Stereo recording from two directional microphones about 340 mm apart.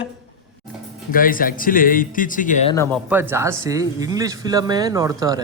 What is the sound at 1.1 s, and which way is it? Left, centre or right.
Speech, left.